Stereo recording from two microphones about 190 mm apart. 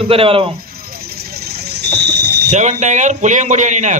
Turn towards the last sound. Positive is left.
turn(degrees=-40)  # may be behind; listen again after turning